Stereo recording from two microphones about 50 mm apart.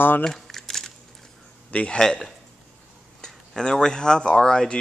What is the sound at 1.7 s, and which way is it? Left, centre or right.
Speech, left.